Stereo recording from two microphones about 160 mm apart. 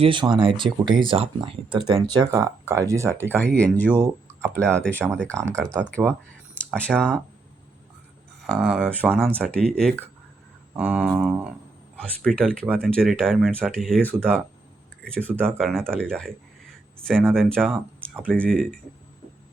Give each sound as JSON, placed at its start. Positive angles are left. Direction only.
{"t": 0.0, "sound": "speech", "side_deg": -30}
{"t": 1.9, "sound": "speech", "side_deg": -25}
{"t": 3.3, "sound": "speech", "side_deg": 10}
{"t": 8.4, "sound": "speech", "side_deg": 0}
{"t": 10.8, "sound": "a sound", "side_deg": -10}
{"t": 12.4, "sound": "speech", "side_deg": 5}
{"t": 17.3, "sound": "speech", "side_deg": 5}
{"t": 17.7, "sound": "speech", "side_deg": -10}
{"t": 18.3, "sound": "speech", "side_deg": 5}